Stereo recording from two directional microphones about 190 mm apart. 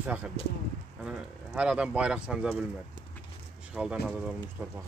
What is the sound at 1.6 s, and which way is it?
Speech, 5° right (ahead or behind).